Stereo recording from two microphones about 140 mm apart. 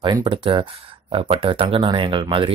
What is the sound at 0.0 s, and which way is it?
Speech, 35° right (ahead or behind).